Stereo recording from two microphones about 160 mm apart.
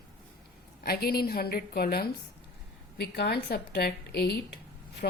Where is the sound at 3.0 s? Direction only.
85° left.